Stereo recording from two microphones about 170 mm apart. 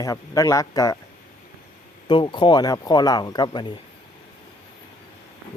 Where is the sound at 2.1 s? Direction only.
30° left (ahead or behind).